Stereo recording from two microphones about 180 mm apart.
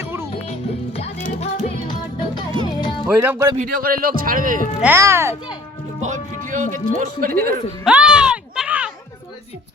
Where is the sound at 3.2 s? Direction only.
15° right (ahead or behind).